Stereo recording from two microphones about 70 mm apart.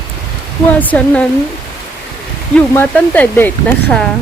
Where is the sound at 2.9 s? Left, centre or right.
Left.